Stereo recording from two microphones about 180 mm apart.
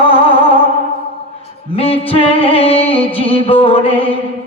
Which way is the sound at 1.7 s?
30° left (ahead or behind).